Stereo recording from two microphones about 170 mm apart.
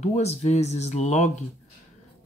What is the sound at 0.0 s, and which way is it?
Speech, 40° left (ahead or behind).